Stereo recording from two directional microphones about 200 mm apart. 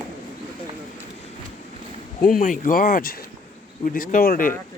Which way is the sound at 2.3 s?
40° left (ahead or behind).